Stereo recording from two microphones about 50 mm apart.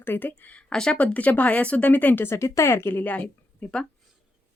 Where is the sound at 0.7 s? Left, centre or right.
Centre.